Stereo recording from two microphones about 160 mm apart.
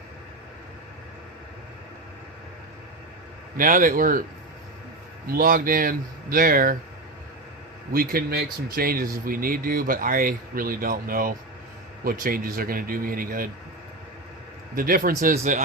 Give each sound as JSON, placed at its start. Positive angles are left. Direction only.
{"t": 3.6, "sound": "speech", "side_deg": -60}
{"t": 5.2, "sound": "speech", "side_deg": -65}
{"t": 7.9, "sound": "speech", "side_deg": -65}
{"t": 14.8, "sound": "speech", "side_deg": -60}